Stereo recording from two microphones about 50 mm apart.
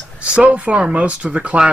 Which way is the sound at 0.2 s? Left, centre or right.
Right.